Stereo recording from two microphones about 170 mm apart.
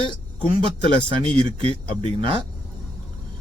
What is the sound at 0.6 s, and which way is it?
Speech, 30° right (ahead or behind).